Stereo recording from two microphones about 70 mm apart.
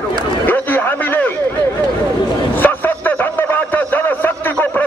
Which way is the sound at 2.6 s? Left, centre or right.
Left.